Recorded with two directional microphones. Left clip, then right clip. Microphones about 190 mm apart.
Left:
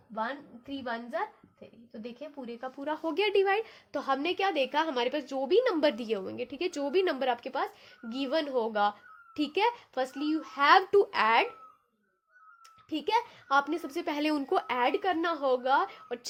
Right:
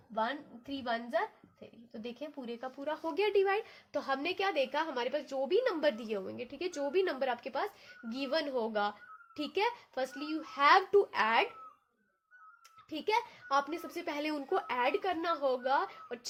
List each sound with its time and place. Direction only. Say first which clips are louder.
0.1 s a woman's voice: even; 20° left (ahead or behind); by 11.4 s 50° left (ahead or behind)
12.9 s speech: left 4 dB; 45° left (ahead or behind)